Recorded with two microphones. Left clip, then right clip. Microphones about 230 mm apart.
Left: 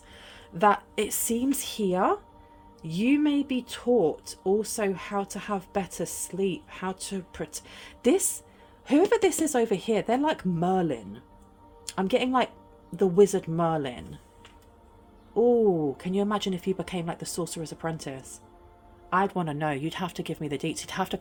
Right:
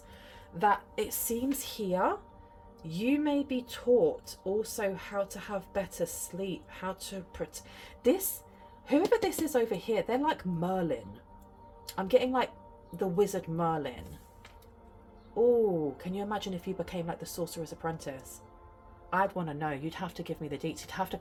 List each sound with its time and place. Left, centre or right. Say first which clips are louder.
0.2 s a woman's voice: left 5 dB; left
8.9 s a woman's voice: left 5 dB; left
16.0 s a woman's voice: left 7 dB; left
19.1 s a woman's voice: left 4 dB; left